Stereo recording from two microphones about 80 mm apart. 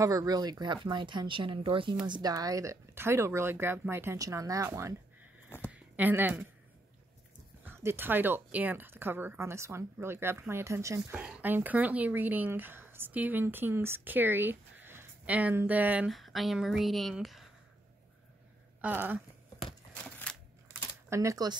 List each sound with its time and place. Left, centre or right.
0.0 s speech: right
0.8 s speech: right
2.0 s a woman's voice: right
2.3 s speech: right
4.2 s speech: right
5.7 s a sound: right
7.6 s a woman's voice: right
11.4 s a woman's voice: right
15.2 s a woman's voice: centre
16.1 s speech: centre
18.8 s speech: right
20.3 s a sound: centre
21.1 s speech: right